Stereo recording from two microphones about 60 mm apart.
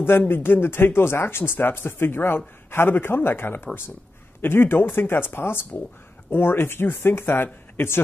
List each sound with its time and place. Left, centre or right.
0.3 s a man's voice: left